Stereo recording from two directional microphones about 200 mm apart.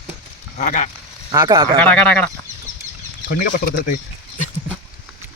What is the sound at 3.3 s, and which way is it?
Speech, 40° left (ahead or behind).